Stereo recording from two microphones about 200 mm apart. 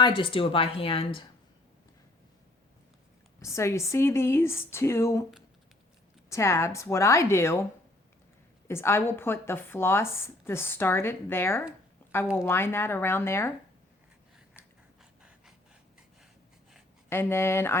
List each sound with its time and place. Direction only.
0.0 s speech: 25° left (ahead or behind)
3.4 s speech: 15° left (ahead or behind)
6.3 s speech: 15° left (ahead or behind)
8.6 s speech: 10° left (ahead or behind)
17.1 s speech: 10° left (ahead or behind)